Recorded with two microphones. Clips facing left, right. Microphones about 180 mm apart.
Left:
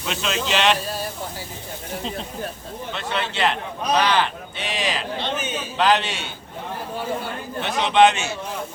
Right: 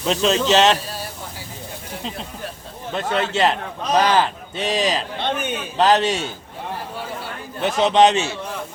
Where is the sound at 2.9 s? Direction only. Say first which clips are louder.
Right 6 dB; 45° right (ahead or behind).